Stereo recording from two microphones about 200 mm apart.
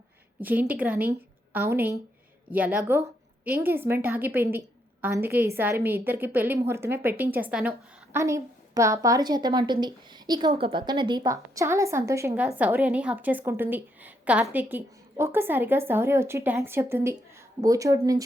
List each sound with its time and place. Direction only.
0.4 s a woman's voice: 10° right (ahead or behind)